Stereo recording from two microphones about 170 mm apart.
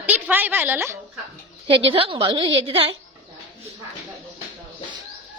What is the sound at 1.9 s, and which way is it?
A woman's voice, 30° right (ahead or behind).